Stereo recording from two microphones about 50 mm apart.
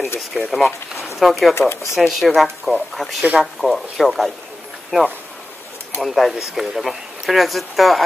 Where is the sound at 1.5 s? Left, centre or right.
Left.